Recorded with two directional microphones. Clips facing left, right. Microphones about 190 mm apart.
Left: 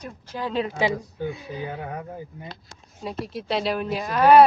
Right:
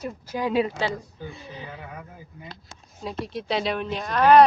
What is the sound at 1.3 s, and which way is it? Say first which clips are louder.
Speech: left 7 dB; 5° left (ahead or behind).